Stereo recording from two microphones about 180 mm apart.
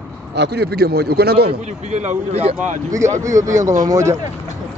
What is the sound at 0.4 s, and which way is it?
A man's voice, 65° right (ahead or behind).